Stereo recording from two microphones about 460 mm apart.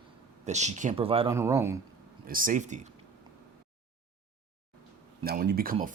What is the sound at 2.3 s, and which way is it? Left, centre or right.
Speech, centre.